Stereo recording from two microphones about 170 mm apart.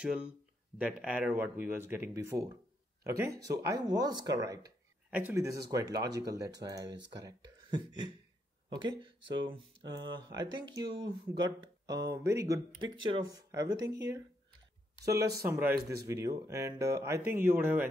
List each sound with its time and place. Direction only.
0.0 s speech: 5° right (ahead or behind)
15.4 s speech: 15° right (ahead or behind)